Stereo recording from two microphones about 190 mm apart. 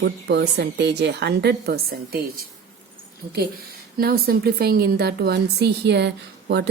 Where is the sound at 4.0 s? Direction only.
55° right (ahead or behind).